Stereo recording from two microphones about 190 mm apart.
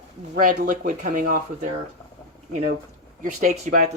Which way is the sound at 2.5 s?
30° right (ahead or behind).